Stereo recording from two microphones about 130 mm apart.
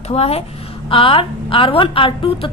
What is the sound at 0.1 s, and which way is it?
A woman's voice, 50° left (ahead or behind).